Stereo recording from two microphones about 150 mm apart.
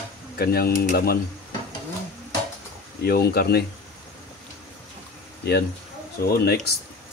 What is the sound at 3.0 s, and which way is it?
Speech, 90° left.